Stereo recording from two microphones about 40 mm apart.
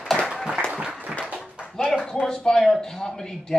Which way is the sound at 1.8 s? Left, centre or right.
Centre.